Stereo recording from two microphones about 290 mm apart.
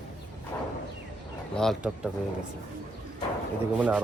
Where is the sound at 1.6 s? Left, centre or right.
Centre.